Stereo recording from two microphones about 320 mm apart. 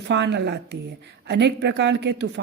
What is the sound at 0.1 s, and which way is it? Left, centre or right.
A woman's voice, right.